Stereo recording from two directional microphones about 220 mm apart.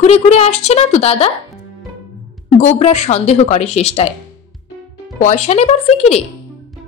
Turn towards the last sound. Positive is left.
turn(degrees=30)  # may be behind; listen again after turning